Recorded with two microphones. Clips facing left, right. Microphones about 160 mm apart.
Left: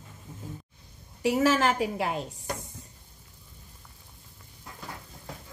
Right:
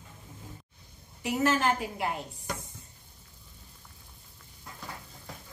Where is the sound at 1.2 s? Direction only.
90° left.